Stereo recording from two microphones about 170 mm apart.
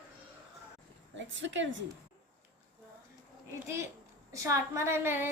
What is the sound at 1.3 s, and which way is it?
Speech, 90° right.